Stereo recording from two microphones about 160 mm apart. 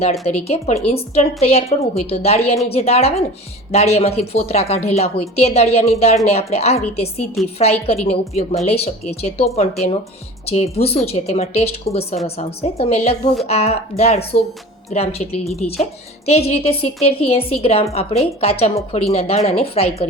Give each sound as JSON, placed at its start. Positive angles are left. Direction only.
{"t": 0.0, "sound": "a woman's voice", "side_deg": 40}